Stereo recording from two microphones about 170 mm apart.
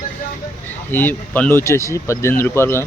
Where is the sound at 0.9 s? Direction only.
10° left (ahead or behind).